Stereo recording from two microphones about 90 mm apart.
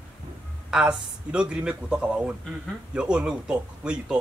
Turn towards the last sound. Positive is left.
turn(degrees=-10)  # may be behind; listen again after turning